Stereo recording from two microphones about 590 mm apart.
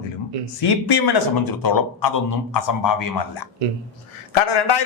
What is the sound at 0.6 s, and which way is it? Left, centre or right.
A man's voice, left.